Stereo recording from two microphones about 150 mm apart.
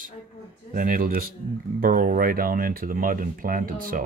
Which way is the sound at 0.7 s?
65° right (ahead or behind).